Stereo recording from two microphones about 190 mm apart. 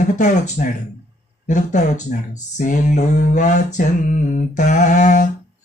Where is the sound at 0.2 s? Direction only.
40° left (ahead or behind).